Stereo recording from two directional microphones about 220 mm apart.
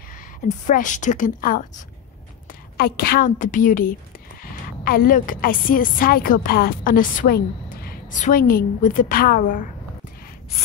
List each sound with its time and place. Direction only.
0.4 s a woman's voice: 35° left (ahead or behind)
2.8 s a woman's voice: 45° left (ahead or behind)